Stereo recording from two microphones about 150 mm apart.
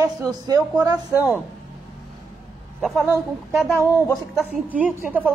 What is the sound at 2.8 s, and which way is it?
Speech, centre (ahead or behind).